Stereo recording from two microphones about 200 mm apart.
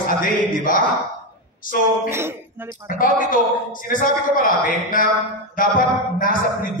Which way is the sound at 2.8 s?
45° left (ahead or behind).